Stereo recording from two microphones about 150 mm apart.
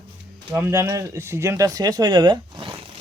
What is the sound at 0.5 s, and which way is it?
Speech, 20° right (ahead or behind).